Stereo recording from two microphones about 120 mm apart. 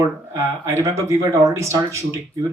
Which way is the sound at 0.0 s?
25° right (ahead or behind).